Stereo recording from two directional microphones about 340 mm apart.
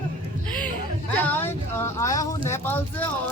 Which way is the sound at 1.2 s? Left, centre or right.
Centre.